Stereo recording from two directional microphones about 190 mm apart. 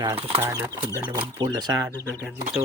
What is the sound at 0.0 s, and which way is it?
Speech, 25° right (ahead or behind).